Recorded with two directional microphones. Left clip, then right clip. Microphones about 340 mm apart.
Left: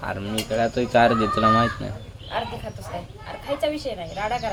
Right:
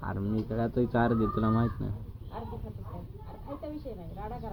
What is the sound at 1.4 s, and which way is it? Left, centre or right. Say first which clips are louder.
Filing: left 13 dB; left.